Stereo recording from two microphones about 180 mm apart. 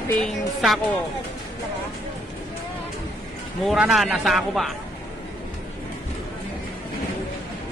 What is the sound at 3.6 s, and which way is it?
A man's voice, 5° right (ahead or behind).